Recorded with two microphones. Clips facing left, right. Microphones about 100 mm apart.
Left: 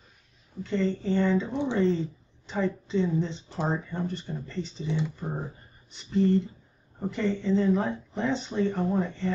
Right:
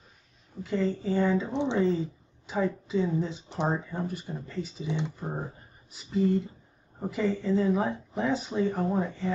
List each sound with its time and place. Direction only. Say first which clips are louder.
0.7 s speech: left 1 dB; 5° right (ahead or behind)
1.5 s speech: even; 20° right (ahead or behind)
1.8 s speech: left 1 dB; 5° right (ahead or behind)